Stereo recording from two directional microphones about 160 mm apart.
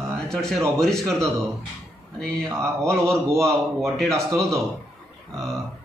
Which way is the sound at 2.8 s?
5° left (ahead or behind).